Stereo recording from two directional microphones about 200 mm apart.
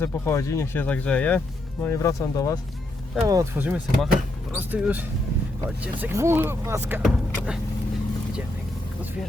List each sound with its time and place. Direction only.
0.0 s speech: 15° left (ahead or behind)
3.2 s speech: 15° right (ahead or behind)
7.0 s speech: centre (ahead or behind)